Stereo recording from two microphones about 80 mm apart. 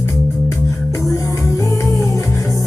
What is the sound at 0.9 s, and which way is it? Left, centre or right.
Music, left.